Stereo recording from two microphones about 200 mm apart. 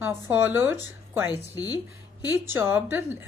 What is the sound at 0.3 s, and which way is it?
Speech, 10° right (ahead or behind).